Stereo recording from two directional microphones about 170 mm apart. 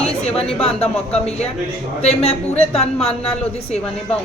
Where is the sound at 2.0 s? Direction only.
35° left (ahead or behind).